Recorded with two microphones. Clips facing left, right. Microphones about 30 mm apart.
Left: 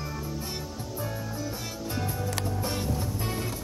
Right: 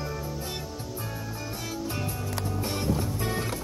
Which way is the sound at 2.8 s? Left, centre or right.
Right.